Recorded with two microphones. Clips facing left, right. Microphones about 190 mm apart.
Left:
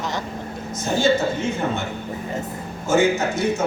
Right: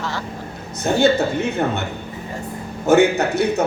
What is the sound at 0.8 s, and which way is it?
A man's voice, 65° right (ahead or behind).